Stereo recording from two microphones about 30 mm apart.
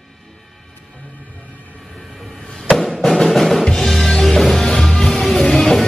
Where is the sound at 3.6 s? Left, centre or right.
Centre.